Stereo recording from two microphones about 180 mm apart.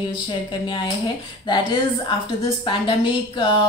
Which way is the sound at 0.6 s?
25° left (ahead or behind).